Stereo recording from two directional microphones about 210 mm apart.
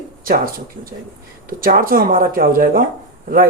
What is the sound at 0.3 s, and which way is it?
Speech, 45° right (ahead or behind).